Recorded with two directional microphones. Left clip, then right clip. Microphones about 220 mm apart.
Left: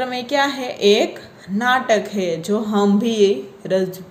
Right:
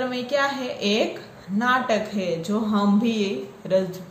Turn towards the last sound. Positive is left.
turn(degrees=35)  # may be behind; listen again after turning